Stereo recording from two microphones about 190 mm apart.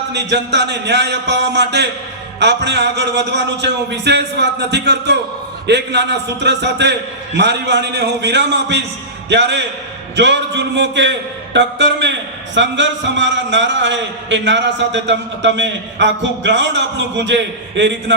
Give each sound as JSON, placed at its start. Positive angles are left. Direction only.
{"t": 0.1, "sound": "a man's voice", "side_deg": -65}